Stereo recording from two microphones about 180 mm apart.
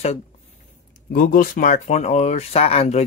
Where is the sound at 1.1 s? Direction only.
55° left (ahead or behind); by 3.0 s 35° left (ahead or behind).